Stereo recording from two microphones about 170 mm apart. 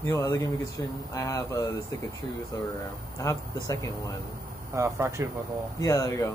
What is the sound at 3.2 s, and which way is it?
Speech, 20° left (ahead or behind).